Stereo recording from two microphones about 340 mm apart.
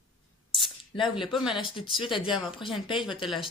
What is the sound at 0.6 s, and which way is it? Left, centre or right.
Speech, centre.